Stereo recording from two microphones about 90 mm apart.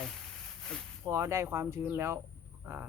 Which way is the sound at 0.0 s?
5° left (ahead or behind).